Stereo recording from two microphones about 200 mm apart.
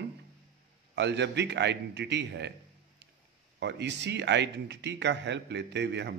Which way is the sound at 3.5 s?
60° right (ahead or behind).